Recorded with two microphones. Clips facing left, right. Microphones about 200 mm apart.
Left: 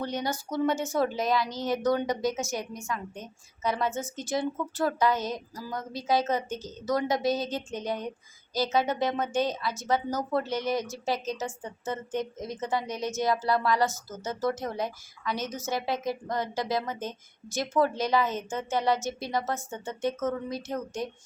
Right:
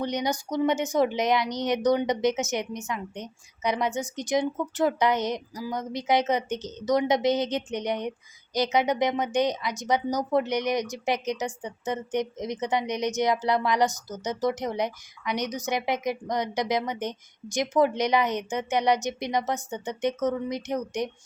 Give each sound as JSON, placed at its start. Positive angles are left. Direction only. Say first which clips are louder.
{"t": 0.0, "sound": "a woman's voice", "louder": "right 3 dB", "side_deg": -15}